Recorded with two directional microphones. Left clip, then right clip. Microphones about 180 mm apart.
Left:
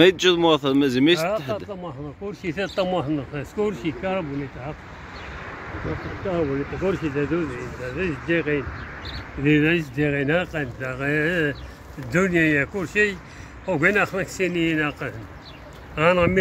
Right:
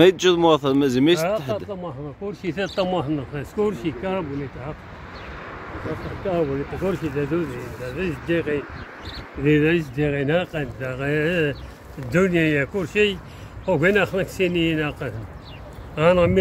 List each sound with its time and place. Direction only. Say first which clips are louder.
0.0 s speech: right 1 dB; 5° right (ahead or behind)
2.4 s speech: even; 15° left (ahead or behind); by 4.7 s 45° left (ahead or behind)
5.4 s vehicle: even; 60° right (ahead or behind)
6.2 s speech: right 1 dB; 50° left (ahead or behind)
8.0 s speech: even; 25° left (ahead or behind)
9.4 s speech: right 1 dB; 45° left (ahead or behind)
9.9 s speech: even; centre (ahead or behind)